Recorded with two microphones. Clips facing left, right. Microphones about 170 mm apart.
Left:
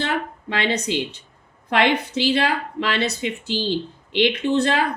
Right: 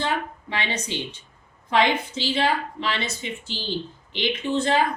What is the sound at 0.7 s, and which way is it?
A woman's voice, 70° left (ahead or behind).